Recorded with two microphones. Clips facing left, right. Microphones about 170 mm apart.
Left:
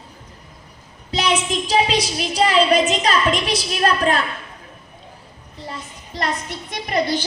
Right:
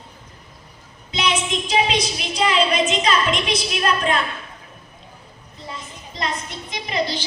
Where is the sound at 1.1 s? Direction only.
35° left (ahead or behind).